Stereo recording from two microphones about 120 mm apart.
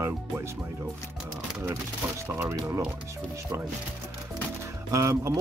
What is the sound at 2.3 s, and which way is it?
Speech, 20° right (ahead or behind).